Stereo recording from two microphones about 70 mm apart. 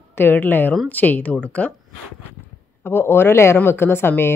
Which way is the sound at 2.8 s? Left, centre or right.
Left.